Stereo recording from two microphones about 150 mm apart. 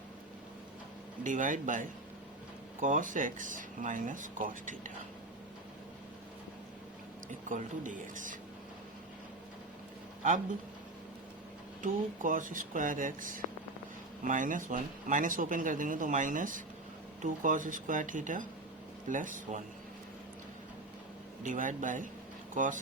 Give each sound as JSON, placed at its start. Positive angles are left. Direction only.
{"t": 1.2, "sound": "speech", "side_deg": -60}
{"t": 7.3, "sound": "speech", "side_deg": -60}
{"t": 11.8, "sound": "speech", "side_deg": -60}
{"t": 21.4, "sound": "speech", "side_deg": -60}